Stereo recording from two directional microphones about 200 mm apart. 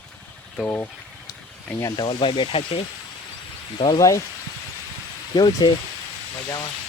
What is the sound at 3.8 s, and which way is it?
Speech, 20° left (ahead or behind).